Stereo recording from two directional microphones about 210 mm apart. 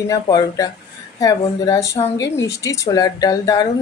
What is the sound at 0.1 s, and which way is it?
Speech, 15° left (ahead or behind).